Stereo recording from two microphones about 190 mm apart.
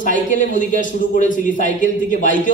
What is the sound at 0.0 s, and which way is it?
Speech, 45° left (ahead or behind).